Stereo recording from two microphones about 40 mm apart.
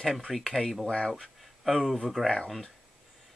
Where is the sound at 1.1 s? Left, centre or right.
Centre.